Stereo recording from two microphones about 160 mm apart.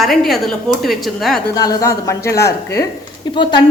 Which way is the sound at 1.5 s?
20° left (ahead or behind).